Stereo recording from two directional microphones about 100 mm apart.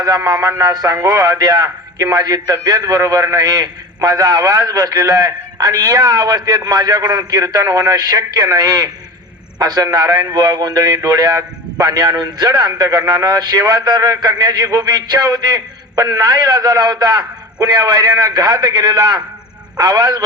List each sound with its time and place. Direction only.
0.3 s a man's voice: 35° right (ahead or behind)